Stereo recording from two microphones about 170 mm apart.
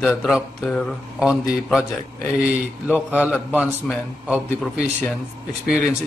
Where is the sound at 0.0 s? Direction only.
Centre (ahead or behind).